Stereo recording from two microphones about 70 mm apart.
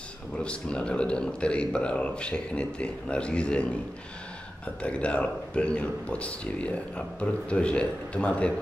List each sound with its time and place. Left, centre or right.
0.4 s speech: centre
4.8 s speech: centre